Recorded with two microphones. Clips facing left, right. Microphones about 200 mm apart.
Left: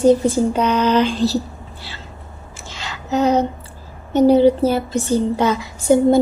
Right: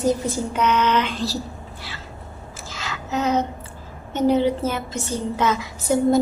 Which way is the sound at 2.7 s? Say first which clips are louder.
Left 5 dB; 30° left (ahead or behind).